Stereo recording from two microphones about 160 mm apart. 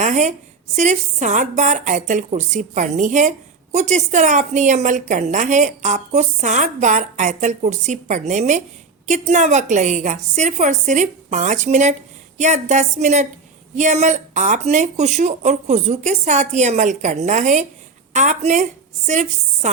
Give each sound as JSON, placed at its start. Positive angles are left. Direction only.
{"t": 0.0, "sound": "a woman's voice", "side_deg": -50}